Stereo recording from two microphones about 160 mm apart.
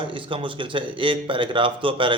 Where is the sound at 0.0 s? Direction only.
30° right (ahead or behind).